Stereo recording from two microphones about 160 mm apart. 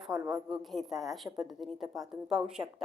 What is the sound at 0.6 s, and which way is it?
Speech, centre (ahead or behind).